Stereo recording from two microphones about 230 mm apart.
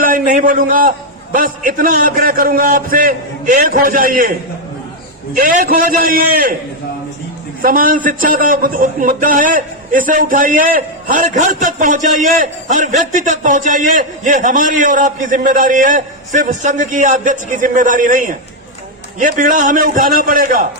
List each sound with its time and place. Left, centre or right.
0.0 s a man's voice: right
5.3 s a man's voice: right
7.6 s a man's voice: right